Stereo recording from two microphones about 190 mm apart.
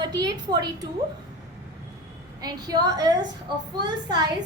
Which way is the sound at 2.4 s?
20° right (ahead or behind).